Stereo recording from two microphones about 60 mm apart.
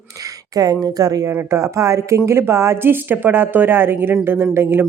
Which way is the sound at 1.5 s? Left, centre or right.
Right.